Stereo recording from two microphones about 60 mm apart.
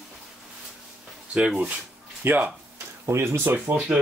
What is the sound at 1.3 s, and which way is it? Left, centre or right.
Speech, centre.